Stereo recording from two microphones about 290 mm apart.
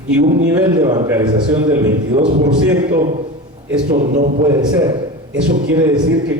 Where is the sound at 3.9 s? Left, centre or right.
Right.